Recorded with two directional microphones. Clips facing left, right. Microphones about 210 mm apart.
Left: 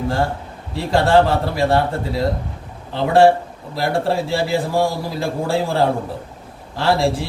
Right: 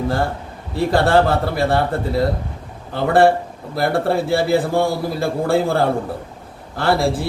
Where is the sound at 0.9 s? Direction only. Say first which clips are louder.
Left 1 dB; centre (ahead or behind).